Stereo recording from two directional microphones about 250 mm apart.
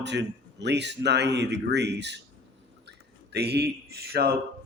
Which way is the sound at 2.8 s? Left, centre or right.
Right.